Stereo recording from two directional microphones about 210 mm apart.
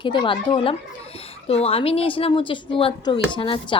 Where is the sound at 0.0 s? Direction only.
20° left (ahead or behind).